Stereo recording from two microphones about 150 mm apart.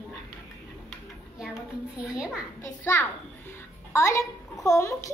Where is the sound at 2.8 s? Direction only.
15° left (ahead or behind).